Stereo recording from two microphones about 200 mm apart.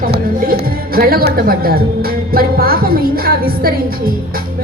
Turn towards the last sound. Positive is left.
turn(degrees=-50)  # may be behind; listen again after turning